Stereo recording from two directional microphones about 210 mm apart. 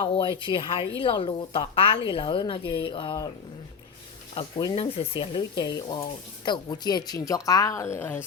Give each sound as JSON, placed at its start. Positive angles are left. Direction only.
{"t": 0.4, "sound": "a woman's voice", "side_deg": 25}
{"t": 4.4, "sound": "a woman's voice", "side_deg": 25}